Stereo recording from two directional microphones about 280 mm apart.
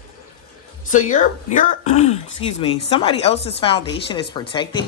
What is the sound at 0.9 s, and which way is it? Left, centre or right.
A woman's voice, left.